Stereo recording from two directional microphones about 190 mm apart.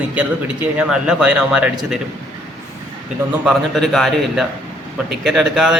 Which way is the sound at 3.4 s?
Centre (ahead or behind).